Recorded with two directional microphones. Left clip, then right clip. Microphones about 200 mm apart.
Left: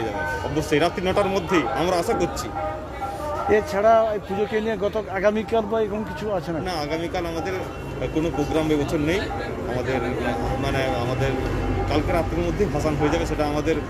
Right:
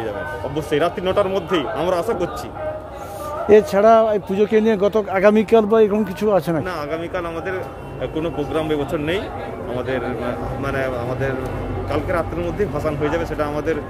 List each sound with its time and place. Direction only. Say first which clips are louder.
0.6 s speech: right 2 dB; 15° right (ahead or behind)
3.4 s a man's voice: right 6 dB; 60° right (ahead or behind)
8.2 s speech: right 1 dB; 10° right (ahead or behind)
10.7 s speech: right 3 dB; 10° right (ahead or behind)
12.8 s speech: right 1 dB; 15° right (ahead or behind)